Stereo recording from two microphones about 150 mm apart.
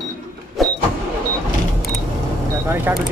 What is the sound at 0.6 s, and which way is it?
Vehicle, centre (ahead or behind).